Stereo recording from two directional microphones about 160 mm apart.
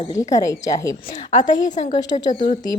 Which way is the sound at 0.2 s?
20° left (ahead or behind).